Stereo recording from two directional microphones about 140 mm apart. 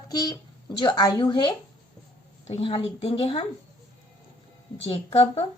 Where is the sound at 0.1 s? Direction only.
30° left (ahead or behind).